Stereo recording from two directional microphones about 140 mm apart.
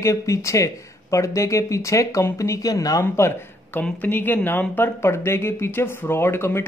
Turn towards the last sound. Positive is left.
turn(degrees=15)  # may be behind; listen again after turning